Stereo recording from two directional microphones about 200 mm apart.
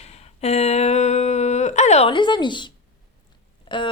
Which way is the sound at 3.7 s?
25° left (ahead or behind).